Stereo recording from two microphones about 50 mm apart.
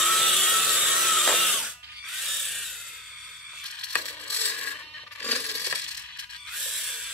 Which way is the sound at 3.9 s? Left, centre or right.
Left.